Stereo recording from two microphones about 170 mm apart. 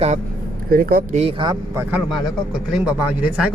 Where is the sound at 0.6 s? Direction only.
60° right (ahead or behind).